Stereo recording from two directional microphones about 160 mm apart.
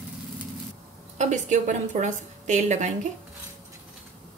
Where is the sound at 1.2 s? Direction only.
50° right (ahead or behind).